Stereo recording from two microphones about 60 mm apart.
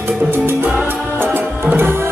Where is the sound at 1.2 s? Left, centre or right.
Right.